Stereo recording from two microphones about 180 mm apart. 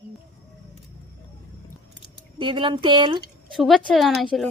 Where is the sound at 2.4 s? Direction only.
25° right (ahead or behind).